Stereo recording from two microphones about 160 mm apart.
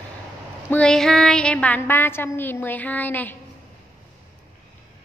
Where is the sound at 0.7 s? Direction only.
5° left (ahead or behind).